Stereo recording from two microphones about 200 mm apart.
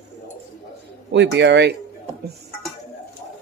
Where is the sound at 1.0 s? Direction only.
60° right (ahead or behind).